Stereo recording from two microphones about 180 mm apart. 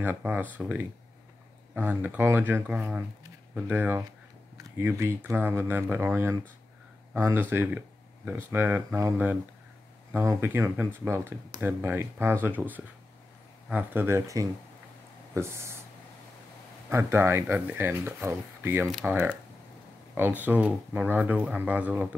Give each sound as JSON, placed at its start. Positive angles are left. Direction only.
{"t": 0.0, "sound": "speech", "side_deg": -10}
{"t": 16.9, "sound": "speech", "side_deg": -15}